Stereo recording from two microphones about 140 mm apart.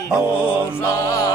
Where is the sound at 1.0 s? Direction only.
25° left (ahead or behind).